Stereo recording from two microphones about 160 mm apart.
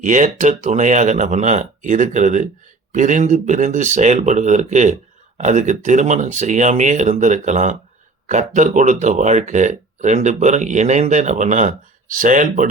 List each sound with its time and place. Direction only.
0.0 s speech: 50° right (ahead or behind)